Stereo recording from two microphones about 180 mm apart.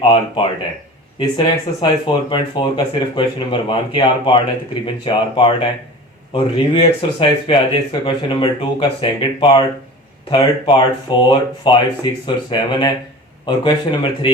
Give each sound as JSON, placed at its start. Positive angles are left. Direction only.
{"t": 1.2, "sound": "speech", "side_deg": 25}